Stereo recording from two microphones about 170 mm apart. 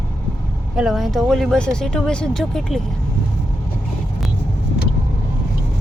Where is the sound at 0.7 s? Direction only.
Centre (ahead or behind).